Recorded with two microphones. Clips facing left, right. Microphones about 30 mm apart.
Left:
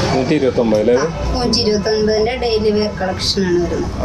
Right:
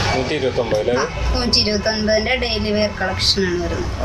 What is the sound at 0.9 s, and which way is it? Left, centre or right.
A woman's voice, right.